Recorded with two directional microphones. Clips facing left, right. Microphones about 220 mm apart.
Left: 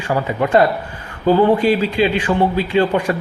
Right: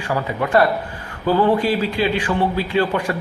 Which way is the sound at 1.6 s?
20° left (ahead or behind).